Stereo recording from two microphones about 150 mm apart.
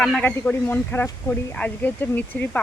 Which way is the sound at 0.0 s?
5° left (ahead or behind).